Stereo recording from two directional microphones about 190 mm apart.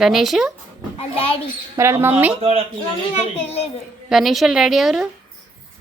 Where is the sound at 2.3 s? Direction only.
30° right (ahead or behind).